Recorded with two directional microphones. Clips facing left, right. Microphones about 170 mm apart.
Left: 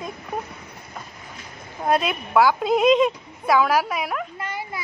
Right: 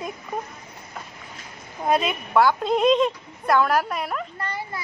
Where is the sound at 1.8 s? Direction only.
Centre (ahead or behind).